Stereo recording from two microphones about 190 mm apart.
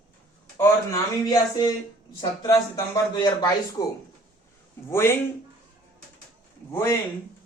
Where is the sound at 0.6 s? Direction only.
15° left (ahead or behind).